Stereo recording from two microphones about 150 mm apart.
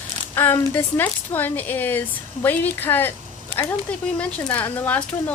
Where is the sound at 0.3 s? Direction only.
15° left (ahead or behind).